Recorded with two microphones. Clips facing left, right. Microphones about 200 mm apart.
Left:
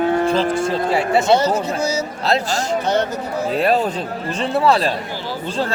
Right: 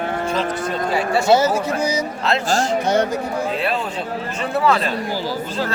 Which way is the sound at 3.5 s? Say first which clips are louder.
Left 6 dB; 40° left (ahead or behind).